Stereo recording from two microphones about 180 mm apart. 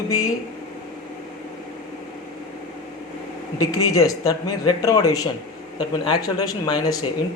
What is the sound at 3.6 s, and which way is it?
A man's voice, 20° left (ahead or behind).